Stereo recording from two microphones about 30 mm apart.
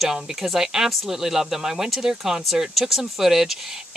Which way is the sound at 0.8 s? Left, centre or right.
Centre.